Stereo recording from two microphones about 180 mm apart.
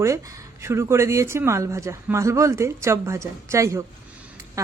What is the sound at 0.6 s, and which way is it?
Speech, 15° right (ahead or behind).